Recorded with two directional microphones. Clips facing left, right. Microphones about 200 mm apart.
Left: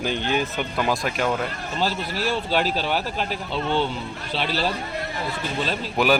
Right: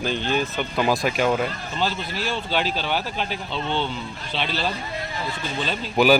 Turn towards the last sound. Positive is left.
turn(degrees=0)  # may be behind; listen again after turning